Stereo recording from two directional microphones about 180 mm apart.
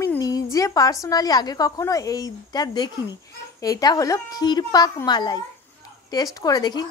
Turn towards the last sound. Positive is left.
turn(degrees=20)  # may be behind; listen again after turning